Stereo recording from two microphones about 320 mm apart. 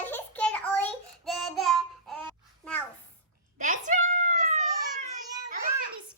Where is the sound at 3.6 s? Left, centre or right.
Right.